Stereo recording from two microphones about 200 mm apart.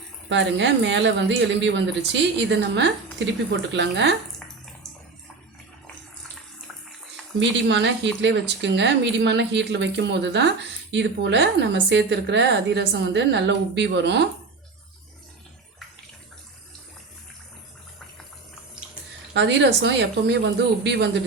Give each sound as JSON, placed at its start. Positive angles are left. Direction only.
{"t": 0.3, "sound": "a woman's voice", "side_deg": -60}
{"t": 7.3, "sound": "a woman's voice", "side_deg": -65}
{"t": 19.3, "sound": "a woman's voice", "side_deg": -60}